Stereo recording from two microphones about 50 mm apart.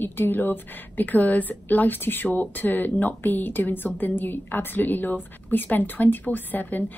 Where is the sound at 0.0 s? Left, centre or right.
Left.